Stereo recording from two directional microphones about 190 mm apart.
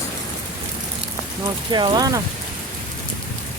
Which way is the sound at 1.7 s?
25° right (ahead or behind).